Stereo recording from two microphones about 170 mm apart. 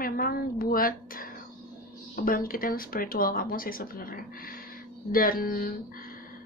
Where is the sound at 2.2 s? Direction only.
55° left (ahead or behind).